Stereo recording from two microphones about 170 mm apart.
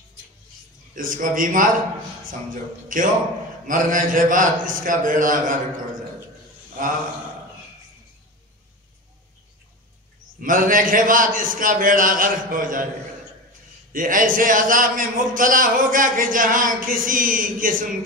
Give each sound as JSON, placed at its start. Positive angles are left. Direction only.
{"t": 0.9, "sound": "a man's voice", "side_deg": -55}
{"t": 10.4, "sound": "a man's voice", "side_deg": -50}
{"t": 13.9, "sound": "a man's voice", "side_deg": -55}